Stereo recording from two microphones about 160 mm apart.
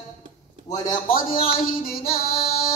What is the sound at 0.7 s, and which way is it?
Speech, 50° left (ahead or behind).